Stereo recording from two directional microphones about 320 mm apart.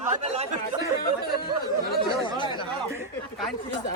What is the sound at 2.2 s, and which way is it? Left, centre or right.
Chatter, centre.